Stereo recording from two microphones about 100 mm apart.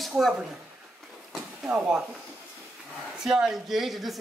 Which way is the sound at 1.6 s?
10° right (ahead or behind).